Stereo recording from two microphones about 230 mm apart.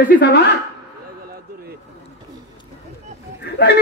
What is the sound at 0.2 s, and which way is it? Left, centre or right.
Speech, left.